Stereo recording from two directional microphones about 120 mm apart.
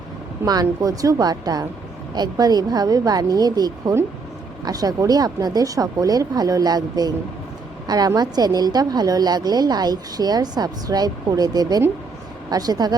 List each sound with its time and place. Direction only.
0.4 s a woman's voice: 30° right (ahead or behind)